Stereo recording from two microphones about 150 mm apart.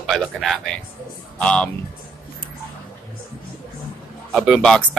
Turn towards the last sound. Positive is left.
turn(degrees=5)  # may be behind; listen again after turning